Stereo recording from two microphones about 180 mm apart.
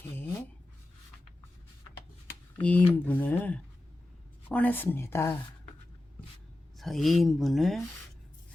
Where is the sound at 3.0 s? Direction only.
10° left (ahead or behind).